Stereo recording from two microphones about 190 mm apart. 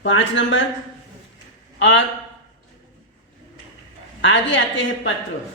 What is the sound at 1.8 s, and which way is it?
Speech, 80° left.